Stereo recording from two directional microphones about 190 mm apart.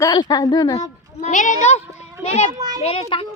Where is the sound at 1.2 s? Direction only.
40° left (ahead or behind).